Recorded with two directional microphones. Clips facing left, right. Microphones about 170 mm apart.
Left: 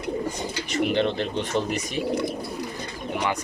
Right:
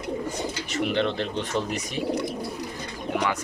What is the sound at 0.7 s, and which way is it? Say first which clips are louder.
Speech: left 2 dB; centre (ahead or behind).